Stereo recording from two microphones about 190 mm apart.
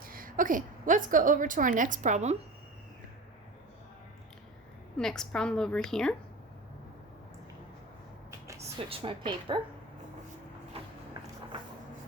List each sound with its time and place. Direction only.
0.0 s a woman's voice: 50° right (ahead or behind)
4.9 s a woman's voice: 5° left (ahead or behind)
8.9 s a woman's voice: 30° right (ahead or behind)
10.8 s a sound: 30° right (ahead or behind)